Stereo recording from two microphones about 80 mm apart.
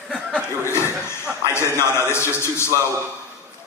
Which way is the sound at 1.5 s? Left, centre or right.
Left.